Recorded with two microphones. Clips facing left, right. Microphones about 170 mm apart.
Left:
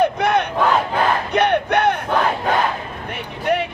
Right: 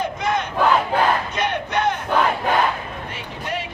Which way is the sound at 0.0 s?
65° left (ahead or behind).